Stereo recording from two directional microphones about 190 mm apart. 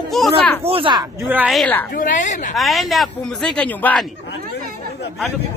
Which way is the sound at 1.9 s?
45° left (ahead or behind).